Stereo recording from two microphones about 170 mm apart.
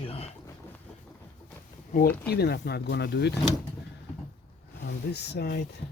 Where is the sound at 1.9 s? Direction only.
55° left (ahead or behind).